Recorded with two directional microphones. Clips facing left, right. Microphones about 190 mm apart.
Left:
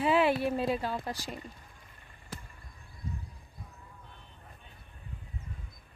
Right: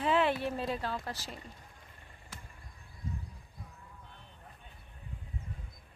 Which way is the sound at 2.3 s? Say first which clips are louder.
Left 7 dB; 35° left (ahead or behind).